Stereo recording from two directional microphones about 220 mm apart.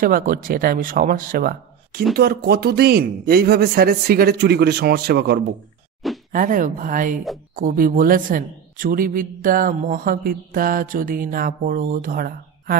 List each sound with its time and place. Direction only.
0.0 s a woman's voice: 40° right (ahead or behind)
6.3 s a woman's voice: 35° right (ahead or behind)